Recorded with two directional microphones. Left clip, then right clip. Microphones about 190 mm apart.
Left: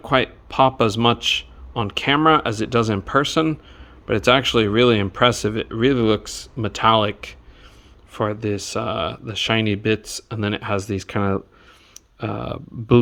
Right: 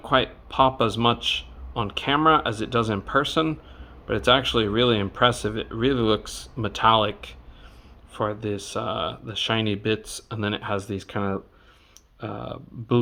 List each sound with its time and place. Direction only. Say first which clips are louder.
0.0 s speech: left 3 dB; 35° left (ahead or behind)